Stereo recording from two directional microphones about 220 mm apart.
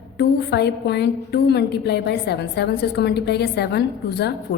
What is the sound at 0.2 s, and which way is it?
A woman's voice, 50° left (ahead or behind).